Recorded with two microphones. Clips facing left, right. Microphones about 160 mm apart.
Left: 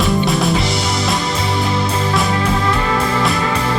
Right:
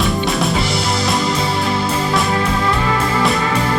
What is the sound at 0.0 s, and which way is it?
Music, centre (ahead or behind).